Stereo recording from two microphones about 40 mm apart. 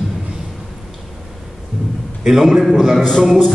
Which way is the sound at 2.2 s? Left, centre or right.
Centre.